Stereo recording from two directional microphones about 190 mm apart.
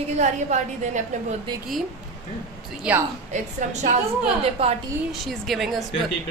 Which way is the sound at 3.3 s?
40° right (ahead or behind).